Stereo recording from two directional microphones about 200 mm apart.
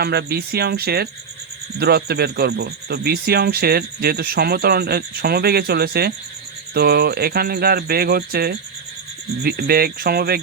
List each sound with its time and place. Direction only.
0.0 s speech: 55° right (ahead or behind)